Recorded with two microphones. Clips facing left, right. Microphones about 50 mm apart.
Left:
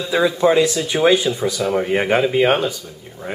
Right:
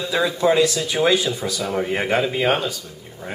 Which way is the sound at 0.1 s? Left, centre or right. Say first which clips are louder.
Left 3 dB; centre.